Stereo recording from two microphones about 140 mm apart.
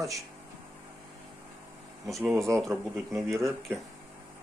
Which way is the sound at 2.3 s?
20° right (ahead or behind).